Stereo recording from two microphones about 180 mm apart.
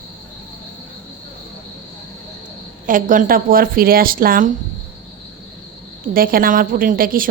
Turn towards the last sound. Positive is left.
turn(degrees=-50)  # may be behind; listen again after turning